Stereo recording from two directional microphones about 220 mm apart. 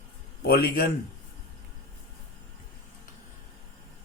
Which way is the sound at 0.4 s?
45° left (ahead or behind).